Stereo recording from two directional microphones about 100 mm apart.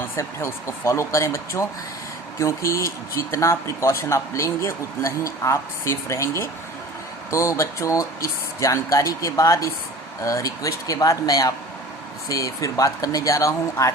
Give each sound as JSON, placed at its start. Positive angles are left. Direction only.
{"t": 0.2, "sound": "speech", "side_deg": 30}